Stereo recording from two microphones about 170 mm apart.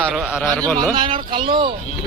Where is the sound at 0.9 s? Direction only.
30° right (ahead or behind).